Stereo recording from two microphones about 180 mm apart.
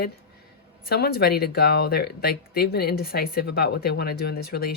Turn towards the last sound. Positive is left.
turn(degrees=55)  # may be behind; listen again after turning